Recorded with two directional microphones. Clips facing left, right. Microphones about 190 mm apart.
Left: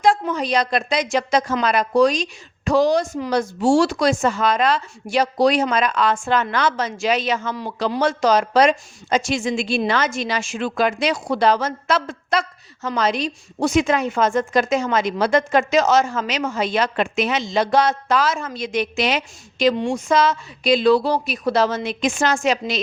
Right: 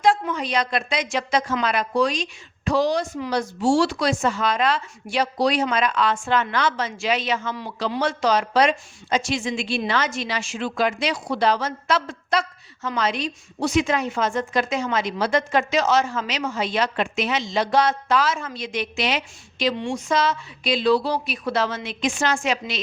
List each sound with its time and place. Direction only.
0.0 s a woman's voice: 40° left (ahead or behind)